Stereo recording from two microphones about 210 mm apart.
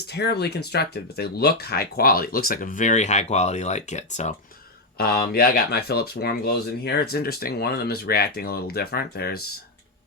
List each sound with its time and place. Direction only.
0.1 s speech: 50° left (ahead or behind); by 4.4 s 35° left (ahead or behind)
4.9 s speech: 45° left (ahead or behind)